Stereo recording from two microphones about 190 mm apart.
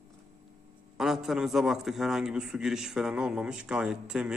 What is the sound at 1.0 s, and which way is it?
A man's voice, centre (ahead or behind).